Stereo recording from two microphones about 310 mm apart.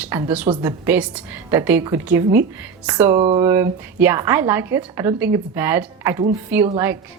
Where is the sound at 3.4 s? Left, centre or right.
Centre.